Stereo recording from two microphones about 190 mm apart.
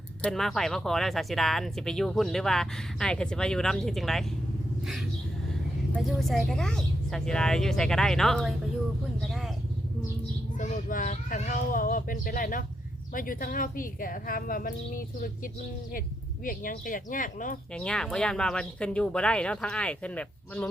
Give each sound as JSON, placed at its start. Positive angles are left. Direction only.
{"t": 0.2, "sound": "speech", "side_deg": 0}
{"t": 5.9, "sound": "speech", "side_deg": 0}
{"t": 9.2, "sound": "a sound", "side_deg": 0}
{"t": 10.6, "sound": "speech", "side_deg": 45}
{"t": 17.7, "sound": "speech", "side_deg": 5}